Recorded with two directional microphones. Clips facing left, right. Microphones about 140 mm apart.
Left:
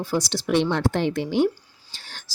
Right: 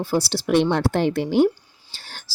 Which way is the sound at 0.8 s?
40° right (ahead or behind).